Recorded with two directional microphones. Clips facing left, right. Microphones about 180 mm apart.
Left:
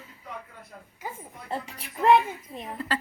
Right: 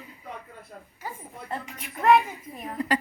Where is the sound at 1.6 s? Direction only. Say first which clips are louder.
Even; 35° left (ahead or behind).